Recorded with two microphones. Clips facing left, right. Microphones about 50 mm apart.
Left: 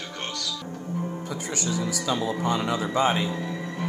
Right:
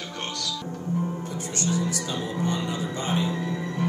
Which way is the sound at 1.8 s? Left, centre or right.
Left.